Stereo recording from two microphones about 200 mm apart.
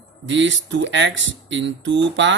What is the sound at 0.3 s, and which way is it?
Speech, 70° right (ahead or behind).